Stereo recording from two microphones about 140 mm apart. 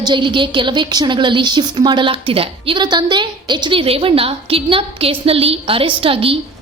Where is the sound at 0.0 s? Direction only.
35° right (ahead or behind).